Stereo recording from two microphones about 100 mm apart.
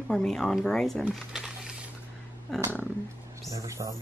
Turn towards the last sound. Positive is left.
turn(degrees=-30)  # may be behind; listen again after turning